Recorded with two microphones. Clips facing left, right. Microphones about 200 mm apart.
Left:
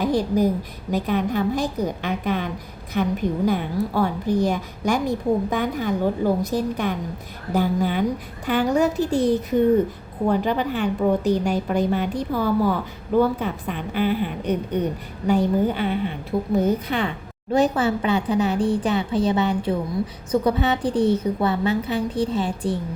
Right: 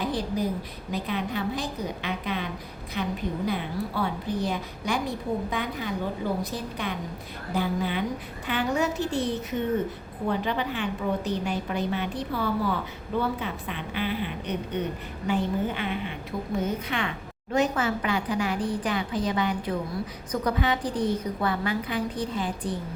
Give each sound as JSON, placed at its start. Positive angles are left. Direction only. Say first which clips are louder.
{"t": 0.0, "sound": "a woman's voice", "louder": "left 8 dB", "side_deg": 45}